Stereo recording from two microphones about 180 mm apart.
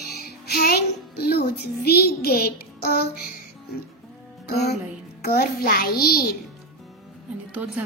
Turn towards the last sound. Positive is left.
turn(degrees=-10)  # may be behind; listen again after turning